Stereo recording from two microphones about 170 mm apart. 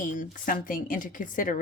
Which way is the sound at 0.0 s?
50° left (ahead or behind).